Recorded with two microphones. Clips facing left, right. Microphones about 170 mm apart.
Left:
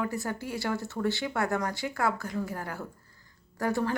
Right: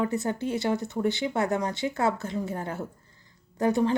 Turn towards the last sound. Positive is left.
turn(degrees=-20)  # may be behind; listen again after turning